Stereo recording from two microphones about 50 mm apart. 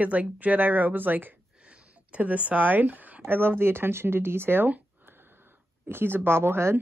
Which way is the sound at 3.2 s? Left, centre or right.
Right.